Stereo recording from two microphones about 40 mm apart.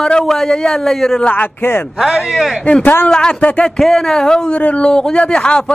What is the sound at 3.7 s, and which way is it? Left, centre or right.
Speech, centre.